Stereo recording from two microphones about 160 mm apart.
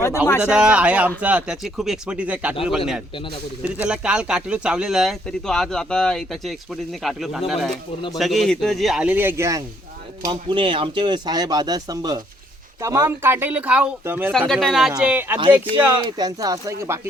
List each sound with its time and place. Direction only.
0.3 s speech: 15° left (ahead or behind)
0.5 s speech: 5° right (ahead or behind)
10.2 s speech: 30° right (ahead or behind); by 14.3 s 15° right (ahead or behind)
14.3 s speech: 5° left (ahead or behind)
16.0 s speech: 25° right (ahead or behind)